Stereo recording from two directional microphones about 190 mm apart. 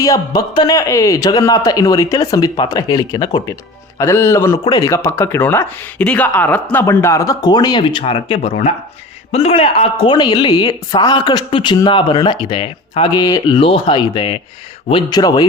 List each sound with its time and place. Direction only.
0.0 s a woman's voice: 20° left (ahead or behind)